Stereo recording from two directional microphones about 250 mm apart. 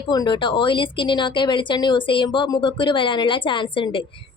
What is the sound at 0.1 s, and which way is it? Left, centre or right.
Speech, centre.